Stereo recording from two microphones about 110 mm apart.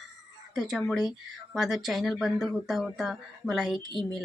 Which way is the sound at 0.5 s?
5° right (ahead or behind).